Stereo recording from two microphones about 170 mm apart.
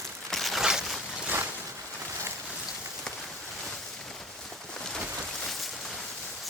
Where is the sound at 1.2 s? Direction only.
10° right (ahead or behind).